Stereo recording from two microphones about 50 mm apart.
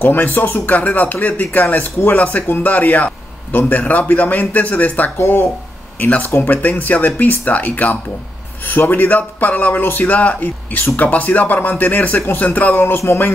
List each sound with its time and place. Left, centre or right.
0.0 s speech: left
0.7 s speech: left
5.1 s speech: left
5.9 s speech: left
12.7 s speech: left